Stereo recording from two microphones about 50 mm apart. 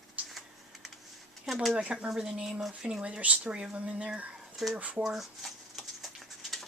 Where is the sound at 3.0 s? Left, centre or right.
Right.